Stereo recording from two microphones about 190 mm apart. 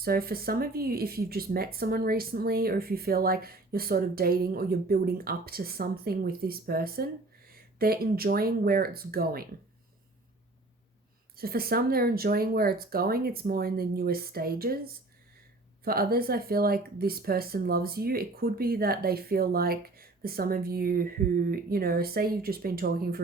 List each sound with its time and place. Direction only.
0.0 s speech: 50° right (ahead or behind)
11.3 s speech: 50° right (ahead or behind)
15.8 s speech: 50° right (ahead or behind)